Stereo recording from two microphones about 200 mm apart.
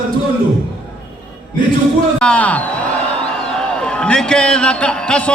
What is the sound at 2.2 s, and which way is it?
A man's voice, 5° left (ahead or behind).